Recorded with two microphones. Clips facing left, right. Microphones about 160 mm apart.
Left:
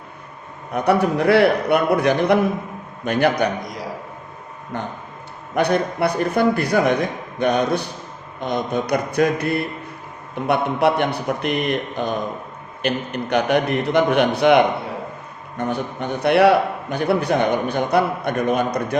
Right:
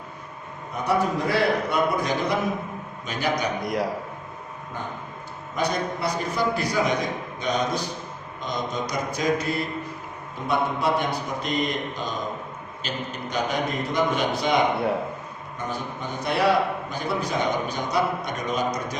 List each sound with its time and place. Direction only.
0.7 s a man's voice: 65° left (ahead or behind)
4.7 s a man's voice: 70° left (ahead or behind)